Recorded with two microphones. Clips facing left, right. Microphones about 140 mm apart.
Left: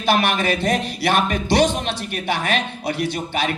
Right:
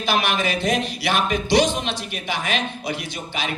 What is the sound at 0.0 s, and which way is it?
Speech, 55° left (ahead or behind).